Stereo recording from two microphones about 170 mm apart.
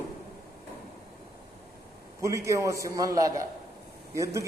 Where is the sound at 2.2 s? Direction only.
15° right (ahead or behind).